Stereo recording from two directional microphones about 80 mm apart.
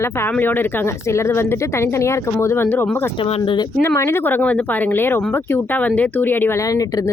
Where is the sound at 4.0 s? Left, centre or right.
Left.